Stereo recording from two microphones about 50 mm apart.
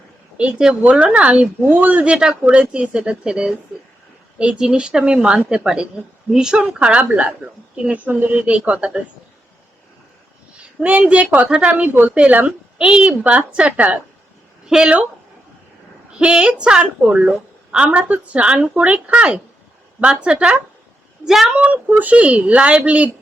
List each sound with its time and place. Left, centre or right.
0.7 s a woman's voice: right
1.7 s speech: right
2.5 s a woman's voice: right
6.6 s a woman's voice: right
8.0 s speech: right
8.4 s a woman's voice: right
10.6 s a woman's voice: right
14.7 s speech: centre
16.1 s a woman's voice: right
16.8 s a woman's voice: right
21.8 s a woman's voice: right